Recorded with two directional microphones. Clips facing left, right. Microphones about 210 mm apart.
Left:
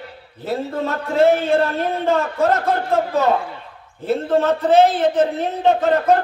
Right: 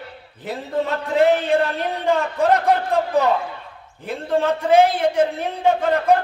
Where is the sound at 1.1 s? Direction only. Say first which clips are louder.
Left 2 dB; 15° right (ahead or behind).